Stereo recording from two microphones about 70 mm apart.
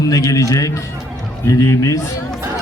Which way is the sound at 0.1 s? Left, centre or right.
Left.